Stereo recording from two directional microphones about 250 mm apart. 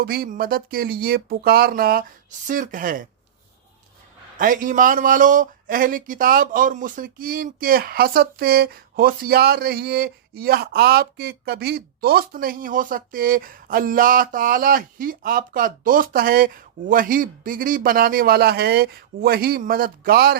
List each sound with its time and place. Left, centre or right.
0.0 s a man's voice: right
4.4 s a man's voice: right